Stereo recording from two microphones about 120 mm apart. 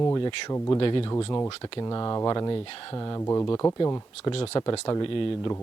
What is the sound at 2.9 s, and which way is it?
Speech, 30° left (ahead or behind).